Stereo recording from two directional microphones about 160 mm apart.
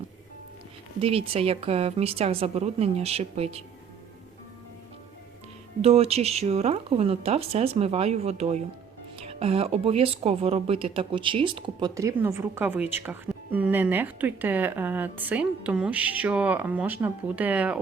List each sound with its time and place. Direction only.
1.0 s speech: 35° right (ahead or behind)
5.8 s speech: 40° right (ahead or behind); by 17.7 s 10° right (ahead or behind)